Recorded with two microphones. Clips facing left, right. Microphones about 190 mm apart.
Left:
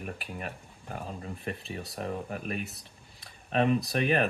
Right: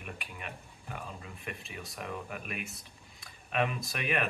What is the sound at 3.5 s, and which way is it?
Speech, 35° left (ahead or behind).